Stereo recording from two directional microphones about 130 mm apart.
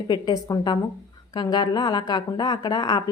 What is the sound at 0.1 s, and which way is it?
A woman's voice, 30° left (ahead or behind).